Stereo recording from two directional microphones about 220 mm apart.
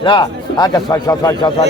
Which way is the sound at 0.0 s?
20° left (ahead or behind).